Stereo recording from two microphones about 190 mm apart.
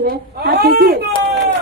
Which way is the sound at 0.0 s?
55° right (ahead or behind).